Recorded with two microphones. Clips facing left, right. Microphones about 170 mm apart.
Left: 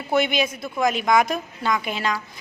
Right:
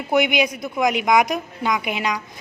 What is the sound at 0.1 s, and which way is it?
A woman's voice, 15° right (ahead or behind).